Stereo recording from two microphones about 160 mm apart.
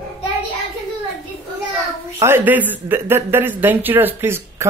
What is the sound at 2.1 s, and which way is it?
Speech, 15° right (ahead or behind).